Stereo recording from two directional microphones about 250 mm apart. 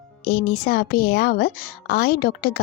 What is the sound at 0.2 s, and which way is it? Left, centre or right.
A woman's voice, left.